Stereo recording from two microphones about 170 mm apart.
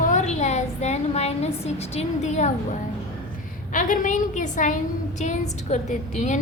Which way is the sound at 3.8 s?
50° left (ahead or behind).